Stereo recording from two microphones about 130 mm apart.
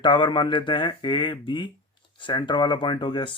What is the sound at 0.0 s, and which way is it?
Speech, 40° left (ahead or behind).